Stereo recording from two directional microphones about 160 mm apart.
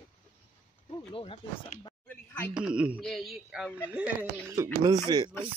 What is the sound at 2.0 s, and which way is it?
Speech, 10° left (ahead or behind).